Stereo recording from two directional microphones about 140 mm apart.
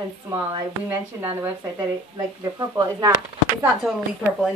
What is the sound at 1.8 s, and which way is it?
Speech, 25° right (ahead or behind).